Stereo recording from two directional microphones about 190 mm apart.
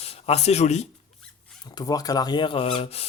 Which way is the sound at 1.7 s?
20° left (ahead or behind).